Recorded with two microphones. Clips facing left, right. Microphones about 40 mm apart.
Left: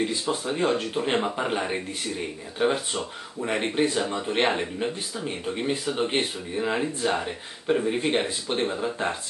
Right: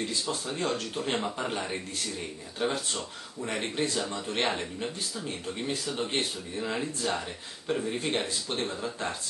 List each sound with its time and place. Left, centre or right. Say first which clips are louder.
0.0 s speech: left 6 dB; left